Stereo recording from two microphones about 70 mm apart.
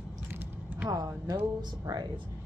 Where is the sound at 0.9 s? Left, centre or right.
Right.